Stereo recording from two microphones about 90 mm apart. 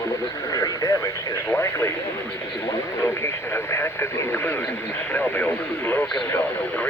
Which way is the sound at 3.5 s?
25° left (ahead or behind).